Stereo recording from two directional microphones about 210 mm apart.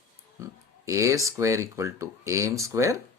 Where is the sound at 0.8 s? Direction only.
15° right (ahead or behind).